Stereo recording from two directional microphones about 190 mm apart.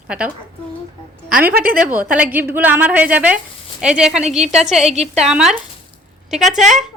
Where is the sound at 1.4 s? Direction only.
50° right (ahead or behind).